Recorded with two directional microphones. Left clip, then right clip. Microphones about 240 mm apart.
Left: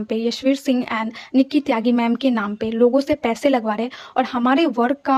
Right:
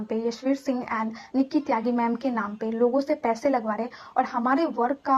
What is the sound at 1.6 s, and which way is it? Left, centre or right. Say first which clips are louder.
A woman's voice: left 5 dB; left.